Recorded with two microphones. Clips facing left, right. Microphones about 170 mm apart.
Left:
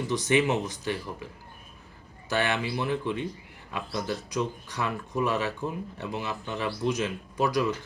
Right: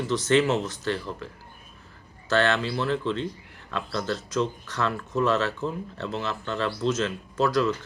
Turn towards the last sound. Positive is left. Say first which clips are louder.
# right 3 dB
turn(degrees=15)  # may be behind; listen again after turning